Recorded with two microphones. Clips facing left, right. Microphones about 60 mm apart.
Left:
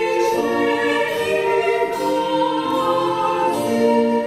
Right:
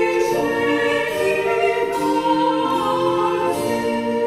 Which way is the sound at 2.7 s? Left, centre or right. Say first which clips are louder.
Even; left.